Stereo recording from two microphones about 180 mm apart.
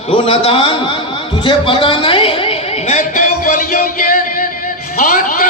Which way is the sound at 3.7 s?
50° left (ahead or behind).